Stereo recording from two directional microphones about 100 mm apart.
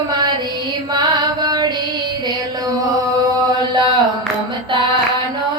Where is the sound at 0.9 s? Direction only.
40° right (ahead or behind).